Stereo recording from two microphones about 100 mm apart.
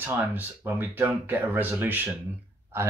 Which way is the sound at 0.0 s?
20° right (ahead or behind).